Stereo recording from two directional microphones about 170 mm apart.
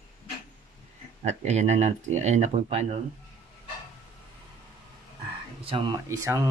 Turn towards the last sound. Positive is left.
turn(degrees=-20)  # may be behind; listen again after turning